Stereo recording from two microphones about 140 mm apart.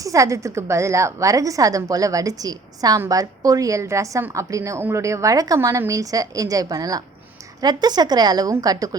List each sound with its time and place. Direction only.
0.0 s a woman's voice: 25° right (ahead or behind)